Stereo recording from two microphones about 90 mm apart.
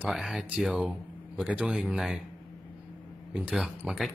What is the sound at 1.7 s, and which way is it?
Speech, centre (ahead or behind).